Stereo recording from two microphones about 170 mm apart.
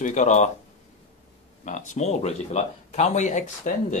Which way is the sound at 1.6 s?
45° left (ahead or behind).